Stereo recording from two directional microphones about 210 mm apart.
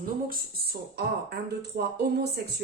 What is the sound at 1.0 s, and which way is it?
Speech, 50° right (ahead or behind).